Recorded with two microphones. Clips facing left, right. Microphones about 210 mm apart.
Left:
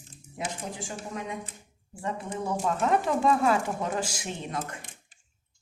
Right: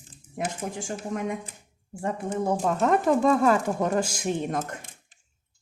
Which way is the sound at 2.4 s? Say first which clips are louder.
Right 3 dB; 40° right (ahead or behind).